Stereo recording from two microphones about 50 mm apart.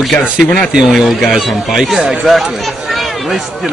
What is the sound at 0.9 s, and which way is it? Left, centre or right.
Speech, centre.